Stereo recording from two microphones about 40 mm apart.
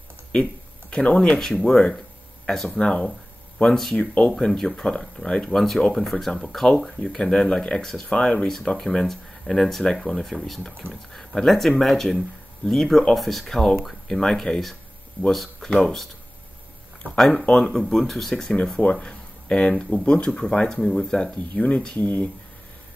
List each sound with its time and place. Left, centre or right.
0.3 s a sound: left
1.4 s speech: centre
2.8 s speech: left
4.4 s speech: centre
5.5 s speech: centre
8.7 s speech: centre
17.5 s speech: centre
18.9 s a sound: left
19.8 s speech: left
21.5 s speech: left
21.9 s speech: left